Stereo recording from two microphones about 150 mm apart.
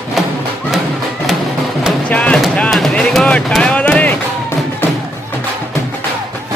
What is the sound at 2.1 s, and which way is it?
Music, 10° left (ahead or behind).